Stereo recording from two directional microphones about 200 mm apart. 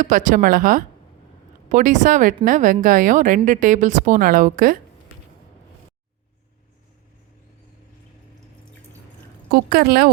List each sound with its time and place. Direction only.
0.0 s speech: 40° right (ahead or behind)
9.5 s a woman's voice: 50° right (ahead or behind)